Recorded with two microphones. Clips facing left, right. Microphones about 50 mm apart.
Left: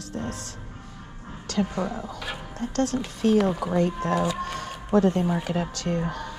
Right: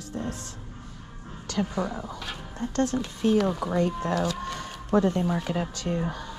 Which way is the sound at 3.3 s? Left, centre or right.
Centre.